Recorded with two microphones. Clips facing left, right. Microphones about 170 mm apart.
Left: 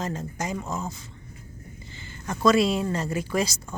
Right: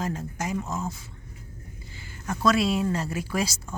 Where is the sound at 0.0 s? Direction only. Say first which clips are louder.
Even; 5° right (ahead or behind).